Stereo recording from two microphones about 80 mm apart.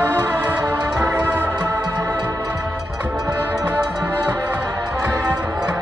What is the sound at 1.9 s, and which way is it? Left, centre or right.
Music, right.